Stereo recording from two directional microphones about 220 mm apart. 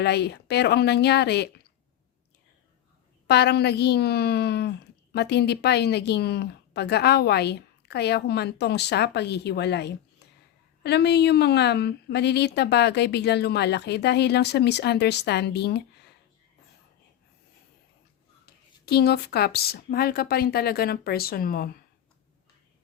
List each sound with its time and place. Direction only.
0.0 s speech: 50° left (ahead or behind)
3.2 s speech: 50° left (ahead or behind)
18.4 s speech: 45° left (ahead or behind)